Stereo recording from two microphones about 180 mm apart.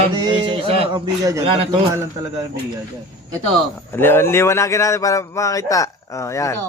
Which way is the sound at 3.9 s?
15° left (ahead or behind).